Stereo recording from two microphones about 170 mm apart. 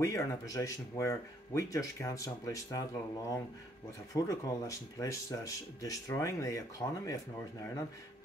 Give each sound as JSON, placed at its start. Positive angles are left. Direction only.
{"t": 0.0, "sound": "speech", "side_deg": 20}